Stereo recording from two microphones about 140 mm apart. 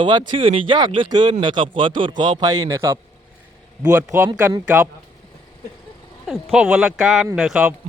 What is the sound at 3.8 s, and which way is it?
A man's voice, 10° right (ahead or behind).